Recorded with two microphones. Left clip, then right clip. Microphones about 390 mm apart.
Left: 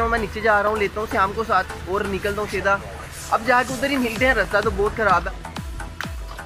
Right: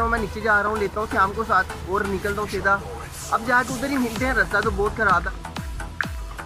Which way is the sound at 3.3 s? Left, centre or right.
Centre.